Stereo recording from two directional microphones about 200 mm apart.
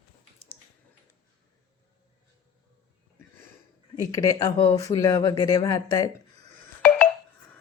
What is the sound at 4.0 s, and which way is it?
Speech, 15° left (ahead or behind).